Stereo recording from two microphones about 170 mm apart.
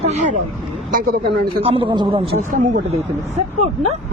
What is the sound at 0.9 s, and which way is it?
Speech, 60° right (ahead or behind).